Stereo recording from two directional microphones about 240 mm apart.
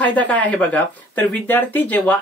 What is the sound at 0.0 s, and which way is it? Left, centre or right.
Speech, centre.